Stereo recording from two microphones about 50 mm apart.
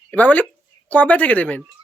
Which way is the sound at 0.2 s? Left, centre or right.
Left.